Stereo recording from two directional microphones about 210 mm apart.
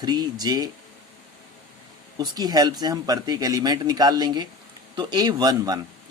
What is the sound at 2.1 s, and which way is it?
A man's voice, 20° right (ahead or behind).